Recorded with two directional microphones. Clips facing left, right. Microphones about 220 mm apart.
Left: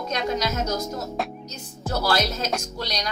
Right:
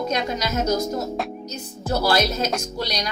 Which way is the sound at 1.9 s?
15° right (ahead or behind).